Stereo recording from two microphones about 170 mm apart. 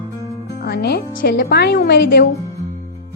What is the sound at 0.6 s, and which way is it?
A woman's voice, 70° left (ahead or behind).